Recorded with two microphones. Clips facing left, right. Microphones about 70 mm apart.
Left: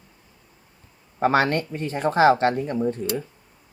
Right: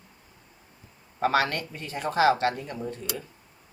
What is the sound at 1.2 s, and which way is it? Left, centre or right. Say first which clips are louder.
Speech: left 5 dB; left.